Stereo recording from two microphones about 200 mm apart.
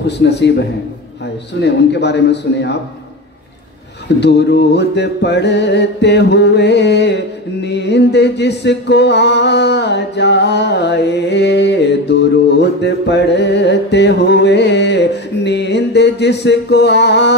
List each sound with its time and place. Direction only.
0.0 s music: 60° left (ahead or behind)
4.2 s music: 60° left (ahead or behind)